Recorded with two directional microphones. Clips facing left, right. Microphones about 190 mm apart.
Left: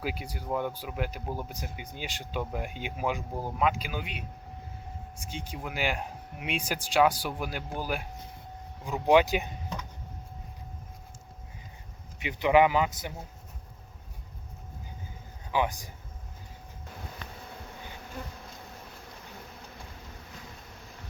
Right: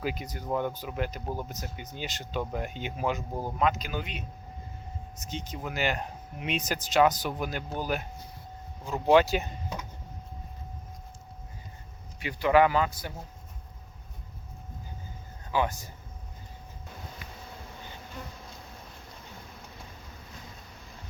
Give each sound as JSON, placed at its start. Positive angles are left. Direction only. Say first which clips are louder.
{"t": 0.0, "sound": "speech", "louder": "right 2 dB", "side_deg": 10}
{"t": 5.2, "sound": "speech", "louder": "right 2 dB", "side_deg": 10}
{"t": 12.2, "sound": "speech", "louder": "even", "side_deg": 20}
{"t": 15.5, "sound": "speech", "louder": "even", "side_deg": 15}